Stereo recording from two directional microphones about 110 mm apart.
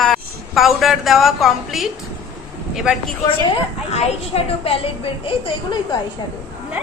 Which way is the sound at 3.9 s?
65° left (ahead or behind).